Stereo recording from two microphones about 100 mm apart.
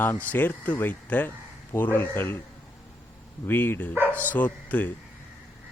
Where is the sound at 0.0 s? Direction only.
20° left (ahead or behind).